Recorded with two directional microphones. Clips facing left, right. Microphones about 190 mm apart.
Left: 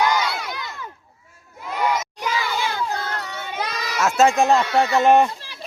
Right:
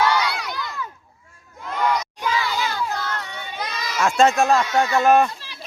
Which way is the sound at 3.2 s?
40° left (ahead or behind).